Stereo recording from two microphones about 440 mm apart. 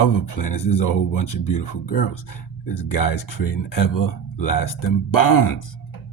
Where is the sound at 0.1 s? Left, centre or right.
Left.